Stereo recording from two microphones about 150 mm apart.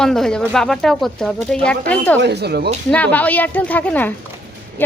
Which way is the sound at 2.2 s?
90° right.